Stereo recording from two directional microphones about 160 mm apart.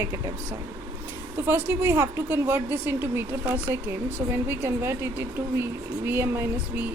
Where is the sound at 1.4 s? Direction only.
10° right (ahead or behind).